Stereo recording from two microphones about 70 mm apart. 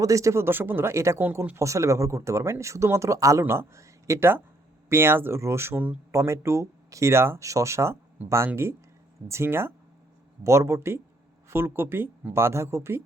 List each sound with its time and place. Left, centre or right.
0.0 s speech: right
1.2 s speech: right
3.4 s speech: right
4.9 s speech: right